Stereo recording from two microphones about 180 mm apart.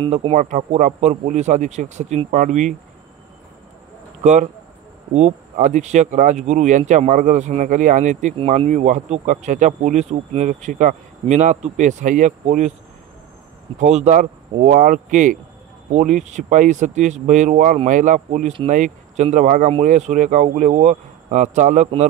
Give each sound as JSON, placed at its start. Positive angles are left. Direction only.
{"t": 0.0, "sound": "speech", "side_deg": -30}
{"t": 4.2, "sound": "speech", "side_deg": -40}
{"t": 13.7, "sound": "speech", "side_deg": -40}